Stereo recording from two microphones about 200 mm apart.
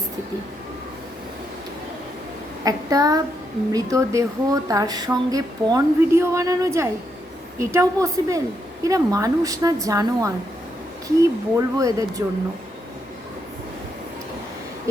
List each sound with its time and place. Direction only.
2.6 s speech: 20° right (ahead or behind)